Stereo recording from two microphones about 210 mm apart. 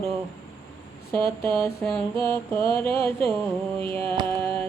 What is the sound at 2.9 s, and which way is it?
Speech, 25° right (ahead or behind).